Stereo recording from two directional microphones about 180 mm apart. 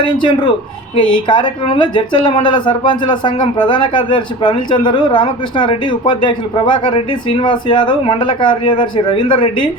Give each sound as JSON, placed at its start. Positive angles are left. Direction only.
{"t": 0.2, "sound": "speech", "side_deg": 25}